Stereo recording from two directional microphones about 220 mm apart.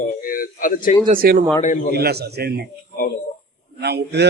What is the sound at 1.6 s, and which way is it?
Speech, 35° left (ahead or behind).